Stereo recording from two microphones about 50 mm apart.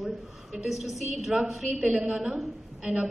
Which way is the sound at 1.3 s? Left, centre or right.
Centre.